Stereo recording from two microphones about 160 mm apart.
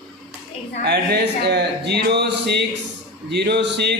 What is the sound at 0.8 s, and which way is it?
Speech, 90° right.